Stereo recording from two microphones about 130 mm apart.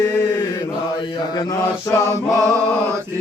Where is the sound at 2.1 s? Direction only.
25° right (ahead or behind).